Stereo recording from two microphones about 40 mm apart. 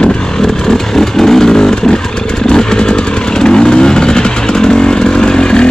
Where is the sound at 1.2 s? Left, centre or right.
Centre.